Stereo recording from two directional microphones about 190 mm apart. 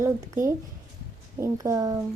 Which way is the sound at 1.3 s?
15° right (ahead or behind).